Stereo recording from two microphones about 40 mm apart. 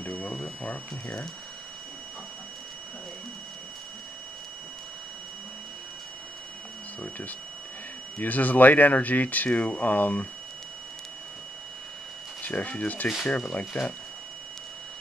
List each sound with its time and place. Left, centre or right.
0.0 s a sound: left
7.0 s speech: left
9.8 s speech: left
12.4 s speech: left
13.5 s speech: left